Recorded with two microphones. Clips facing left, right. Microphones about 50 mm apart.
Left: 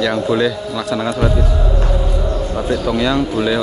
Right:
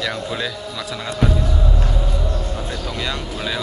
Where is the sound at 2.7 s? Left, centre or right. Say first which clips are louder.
Left 13 dB; centre.